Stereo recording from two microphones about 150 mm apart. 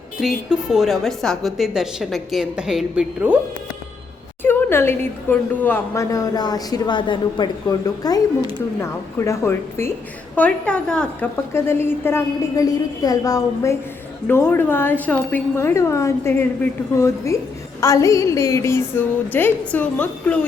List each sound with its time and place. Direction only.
0.2 s a woman's voice: 5° right (ahead or behind)
4.4 s a woman's voice: 15° left (ahead or behind)